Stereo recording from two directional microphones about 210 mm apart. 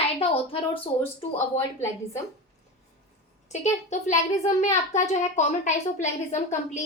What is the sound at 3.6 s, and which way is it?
A child's voice, 35° left (ahead or behind).